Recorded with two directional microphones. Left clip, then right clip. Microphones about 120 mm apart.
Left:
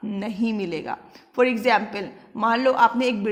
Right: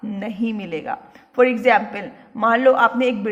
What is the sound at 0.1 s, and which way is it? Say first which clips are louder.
A man's voice: right 1 dB; 45° left (ahead or behind).